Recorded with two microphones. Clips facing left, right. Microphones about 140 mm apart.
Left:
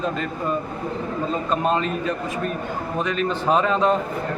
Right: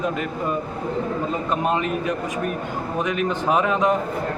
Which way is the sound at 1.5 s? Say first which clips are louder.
Left 1 dB; 15° right (ahead or behind).